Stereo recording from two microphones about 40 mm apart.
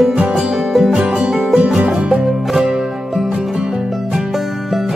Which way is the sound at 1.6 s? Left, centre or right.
Right.